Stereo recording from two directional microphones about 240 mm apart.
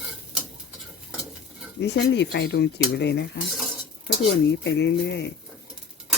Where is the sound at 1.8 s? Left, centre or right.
Left.